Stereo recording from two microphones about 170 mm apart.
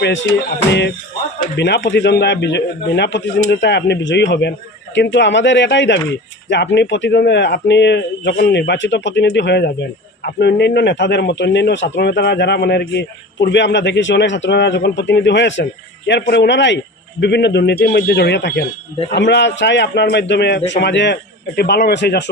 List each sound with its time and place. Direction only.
0.0 s a man's voice: 90° left